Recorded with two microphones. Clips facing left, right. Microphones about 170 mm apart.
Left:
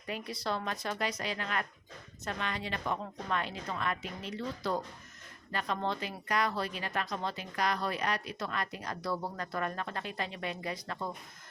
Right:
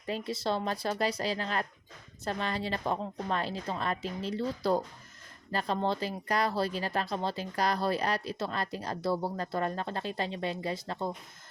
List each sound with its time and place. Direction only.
0.0 s speech: 30° right (ahead or behind)